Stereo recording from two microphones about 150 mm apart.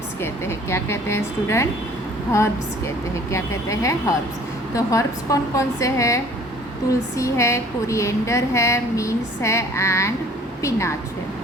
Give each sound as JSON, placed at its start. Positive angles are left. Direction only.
{"t": 0.2, "sound": "a woman's voice", "side_deg": 15}